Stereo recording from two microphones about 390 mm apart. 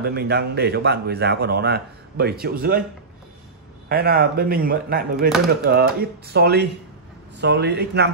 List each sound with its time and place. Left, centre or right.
0.0 s speech: right
3.9 s speech: right